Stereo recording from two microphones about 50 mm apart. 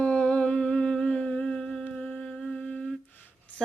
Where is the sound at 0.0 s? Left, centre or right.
Left.